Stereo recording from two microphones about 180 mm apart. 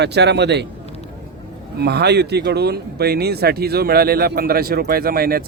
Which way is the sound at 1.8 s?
65° right (ahead or behind).